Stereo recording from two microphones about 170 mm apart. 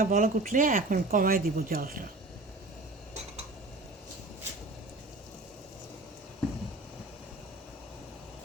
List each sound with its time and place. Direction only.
0.0 s speech: 55° right (ahead or behind)